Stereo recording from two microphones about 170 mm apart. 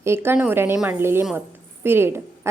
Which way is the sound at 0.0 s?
15° right (ahead or behind).